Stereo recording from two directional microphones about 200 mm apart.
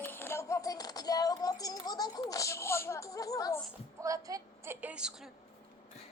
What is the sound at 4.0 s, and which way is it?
A woman's voice, 15° right (ahead or behind).